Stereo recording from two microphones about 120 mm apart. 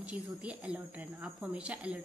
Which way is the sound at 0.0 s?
10° right (ahead or behind).